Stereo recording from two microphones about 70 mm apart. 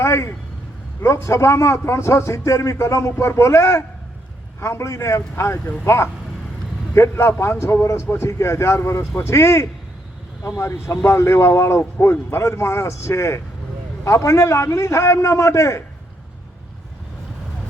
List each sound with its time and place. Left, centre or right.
0.0 s a man's voice: left
11.8 s a man's voice: left